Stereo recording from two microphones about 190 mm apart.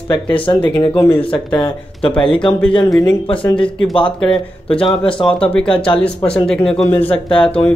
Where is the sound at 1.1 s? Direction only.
25° left (ahead or behind).